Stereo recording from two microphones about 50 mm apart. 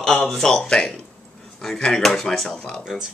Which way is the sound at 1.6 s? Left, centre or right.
Centre.